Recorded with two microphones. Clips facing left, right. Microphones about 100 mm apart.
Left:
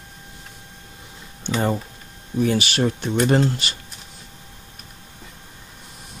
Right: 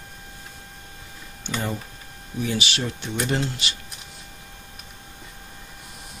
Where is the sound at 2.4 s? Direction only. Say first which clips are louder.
Left 7 dB; 50° left (ahead or behind).